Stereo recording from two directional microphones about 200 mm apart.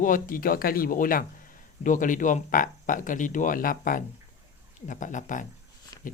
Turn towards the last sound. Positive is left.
turn(degrees=15)  # may be behind; listen again after turning